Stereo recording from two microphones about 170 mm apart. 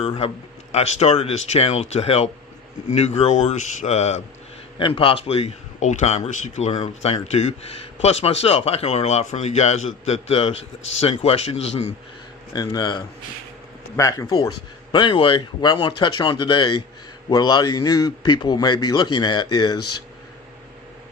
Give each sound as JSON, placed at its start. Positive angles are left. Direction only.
{"t": 0.7, "sound": "a man's voice", "side_deg": 40}
{"t": 4.8, "sound": "a man's voice", "side_deg": 30}
{"t": 10.5, "sound": "a man's voice", "side_deg": 90}
{"t": 11.0, "sound": "a man's voice", "side_deg": 35}
{"t": 12.5, "sound": "a man's voice", "side_deg": 25}